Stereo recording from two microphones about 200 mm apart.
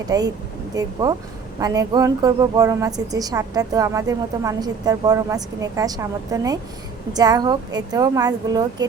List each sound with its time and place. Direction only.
0.1 s a woman's voice: 20° right (ahead or behind)